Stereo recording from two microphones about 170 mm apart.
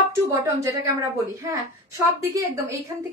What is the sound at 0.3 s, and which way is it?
A woman's voice, 15° right (ahead or behind).